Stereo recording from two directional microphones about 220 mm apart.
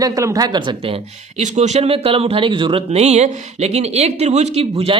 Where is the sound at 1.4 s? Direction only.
30° right (ahead or behind).